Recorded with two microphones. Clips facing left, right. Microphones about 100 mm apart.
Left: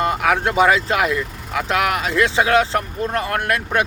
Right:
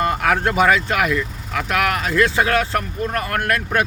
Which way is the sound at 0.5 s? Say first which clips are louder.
Left 1 dB; 20° left (ahead or behind).